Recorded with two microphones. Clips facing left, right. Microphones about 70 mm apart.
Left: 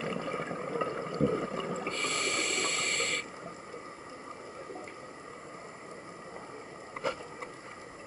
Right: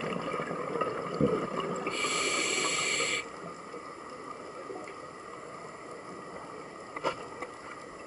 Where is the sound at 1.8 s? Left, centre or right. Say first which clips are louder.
Right 2 dB; centre.